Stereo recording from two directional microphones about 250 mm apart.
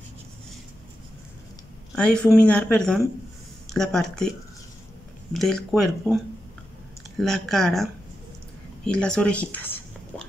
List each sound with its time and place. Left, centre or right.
2.0 s speech: centre
5.3 s speech: centre
7.2 s speech: centre
8.8 s a sound: centre